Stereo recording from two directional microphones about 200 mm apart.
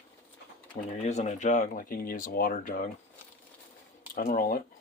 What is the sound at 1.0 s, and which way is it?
Speech, 35° left (ahead or behind).